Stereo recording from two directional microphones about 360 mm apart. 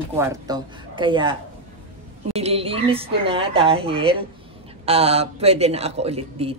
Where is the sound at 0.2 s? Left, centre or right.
Centre.